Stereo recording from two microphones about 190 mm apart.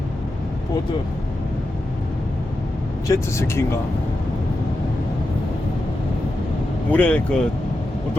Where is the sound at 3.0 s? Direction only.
15° left (ahead or behind).